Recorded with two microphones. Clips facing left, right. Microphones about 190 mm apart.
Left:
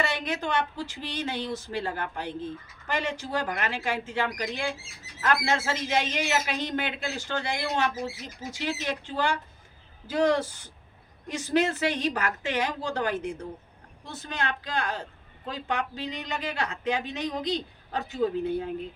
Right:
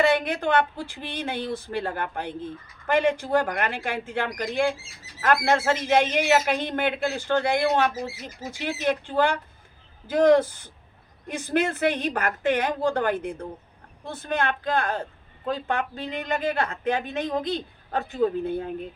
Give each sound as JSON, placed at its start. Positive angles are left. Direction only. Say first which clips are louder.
{"t": 0.0, "sound": "a woman's voice", "louder": "right 7 dB", "side_deg": -55}